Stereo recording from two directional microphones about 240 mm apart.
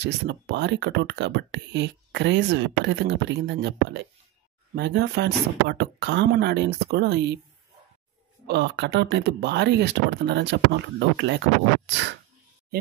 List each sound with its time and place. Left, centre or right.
0.0 s speech: right
8.5 s speech: right